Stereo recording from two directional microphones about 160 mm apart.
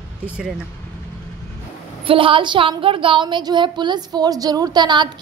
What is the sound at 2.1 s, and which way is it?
Speech, 35° right (ahead or behind).